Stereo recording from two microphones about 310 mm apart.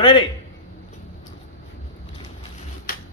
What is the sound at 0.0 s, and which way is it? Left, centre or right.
Speech, centre.